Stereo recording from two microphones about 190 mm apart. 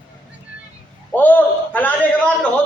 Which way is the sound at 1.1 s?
10° left (ahead or behind).